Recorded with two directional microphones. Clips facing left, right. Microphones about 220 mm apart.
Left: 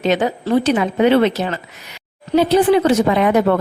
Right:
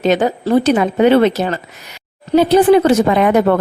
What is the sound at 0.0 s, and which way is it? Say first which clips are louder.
A woman's voice: right 3 dB; 45° right (ahead or behind).